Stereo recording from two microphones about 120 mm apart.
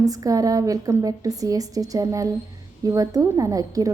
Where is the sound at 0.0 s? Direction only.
30° right (ahead or behind).